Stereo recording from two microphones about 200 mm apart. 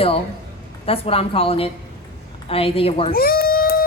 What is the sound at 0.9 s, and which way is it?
A woman's voice, 30° left (ahead or behind).